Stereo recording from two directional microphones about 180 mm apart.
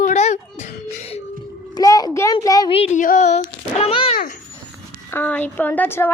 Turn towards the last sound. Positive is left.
turn(degrees=10)  # may be behind; listen again after turning